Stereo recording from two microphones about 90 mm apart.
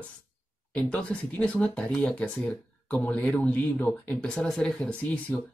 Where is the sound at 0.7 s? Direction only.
15° left (ahead or behind).